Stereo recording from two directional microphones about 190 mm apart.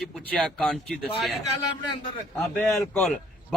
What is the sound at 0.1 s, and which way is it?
Speech, 5° left (ahead or behind).